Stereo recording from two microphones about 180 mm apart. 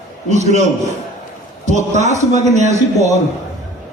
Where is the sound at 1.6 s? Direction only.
40° right (ahead or behind).